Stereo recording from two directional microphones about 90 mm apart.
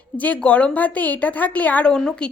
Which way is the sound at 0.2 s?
15° left (ahead or behind).